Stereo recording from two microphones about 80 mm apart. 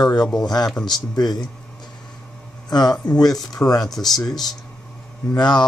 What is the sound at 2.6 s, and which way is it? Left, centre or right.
Speech, left.